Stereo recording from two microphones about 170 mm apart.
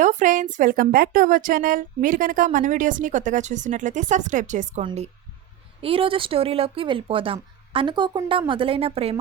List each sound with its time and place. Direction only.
0.0 s a woman's voice: 45° right (ahead or behind)
4.8 s a woman's voice: 30° right (ahead or behind)